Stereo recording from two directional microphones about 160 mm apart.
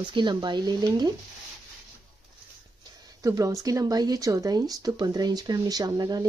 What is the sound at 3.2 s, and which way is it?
Speech, 20° right (ahead or behind).